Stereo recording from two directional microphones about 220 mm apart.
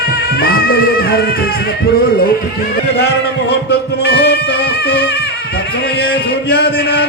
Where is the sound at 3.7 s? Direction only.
45° left (ahead or behind).